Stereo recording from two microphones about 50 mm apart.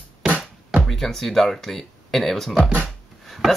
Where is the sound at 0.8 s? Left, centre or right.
Centre.